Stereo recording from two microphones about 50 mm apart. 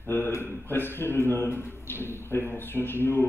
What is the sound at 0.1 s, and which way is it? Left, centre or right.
A man's voice, left.